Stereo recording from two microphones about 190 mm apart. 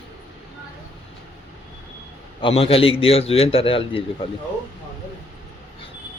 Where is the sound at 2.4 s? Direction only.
30° left (ahead or behind).